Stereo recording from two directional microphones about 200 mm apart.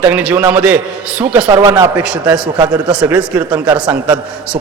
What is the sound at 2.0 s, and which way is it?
A man's voice, 5° right (ahead or behind).